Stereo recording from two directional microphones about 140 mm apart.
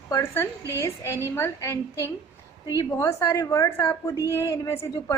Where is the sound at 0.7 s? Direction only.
20° left (ahead or behind).